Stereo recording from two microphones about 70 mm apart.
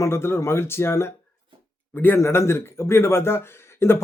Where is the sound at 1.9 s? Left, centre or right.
Left.